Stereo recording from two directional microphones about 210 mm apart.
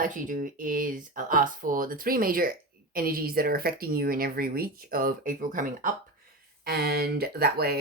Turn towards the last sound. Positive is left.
turn(degrees=-50)  # may be behind; listen again after turning